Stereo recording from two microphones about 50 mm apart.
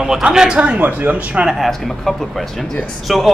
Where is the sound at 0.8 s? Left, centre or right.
Right.